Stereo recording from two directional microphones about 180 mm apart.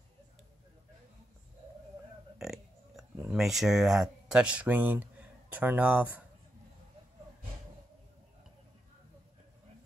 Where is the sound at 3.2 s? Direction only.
Centre (ahead or behind).